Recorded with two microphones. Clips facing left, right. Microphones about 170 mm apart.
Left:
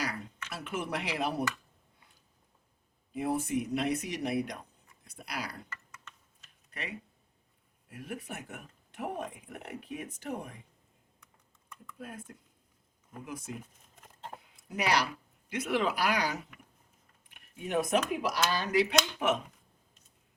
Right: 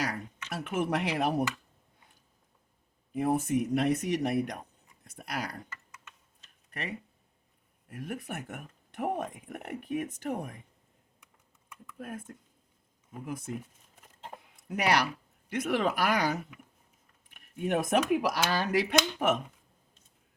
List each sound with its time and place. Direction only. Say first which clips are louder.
0.0 s speech: right 3 dB; 50° right (ahead or behind)
3.1 s speech: right 4 dB; 50° right (ahead or behind)
7.9 s speech: right 3 dB; 50° right (ahead or behind)
11.9 s speech: right 4 dB; 50° right (ahead or behind)
14.5 s speech: right 2 dB; 55° right (ahead or behind)
17.2 s a sound: right 7 dB; 50° right (ahead or behind)
18.1 s speech: right 3 dB; 60° right (ahead or behind)